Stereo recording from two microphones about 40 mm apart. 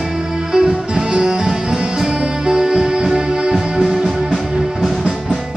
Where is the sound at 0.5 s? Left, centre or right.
Centre.